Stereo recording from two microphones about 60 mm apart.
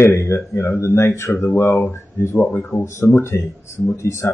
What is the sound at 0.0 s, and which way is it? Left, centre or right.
Speech, left.